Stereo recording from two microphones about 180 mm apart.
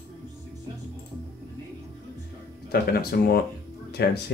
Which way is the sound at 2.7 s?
60° left (ahead or behind).